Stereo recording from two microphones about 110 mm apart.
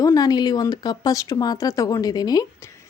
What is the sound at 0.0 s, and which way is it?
Speech, 35° left (ahead or behind).